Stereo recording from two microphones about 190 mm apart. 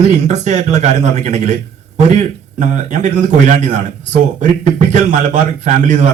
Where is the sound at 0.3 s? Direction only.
35° right (ahead or behind).